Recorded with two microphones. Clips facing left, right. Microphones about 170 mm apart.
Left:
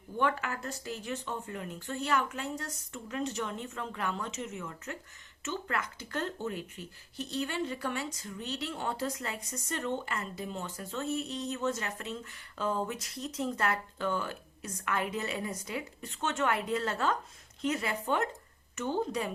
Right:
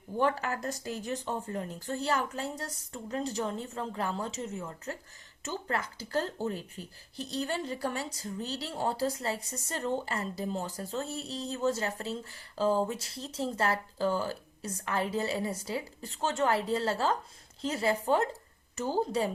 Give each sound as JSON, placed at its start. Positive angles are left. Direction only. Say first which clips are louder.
{"t": 0.2, "sound": "speech", "louder": "right 2 dB", "side_deg": -35}